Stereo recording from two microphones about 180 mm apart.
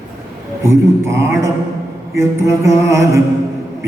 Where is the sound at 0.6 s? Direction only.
15° right (ahead or behind).